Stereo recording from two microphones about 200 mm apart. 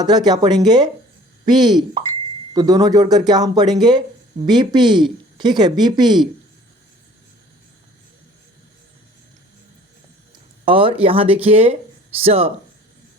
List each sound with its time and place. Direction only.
0.0 s speech: 20° right (ahead or behind)
10.7 s speech: 25° right (ahead or behind)